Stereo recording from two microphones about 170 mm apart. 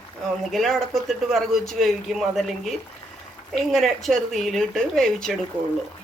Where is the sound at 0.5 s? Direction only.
Centre (ahead or behind).